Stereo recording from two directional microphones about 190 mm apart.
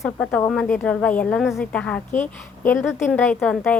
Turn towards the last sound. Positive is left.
turn(degrees=5)  # may be behind; listen again after turning